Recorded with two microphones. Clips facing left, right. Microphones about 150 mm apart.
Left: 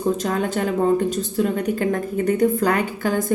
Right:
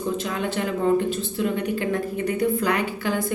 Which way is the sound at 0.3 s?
45° left (ahead or behind).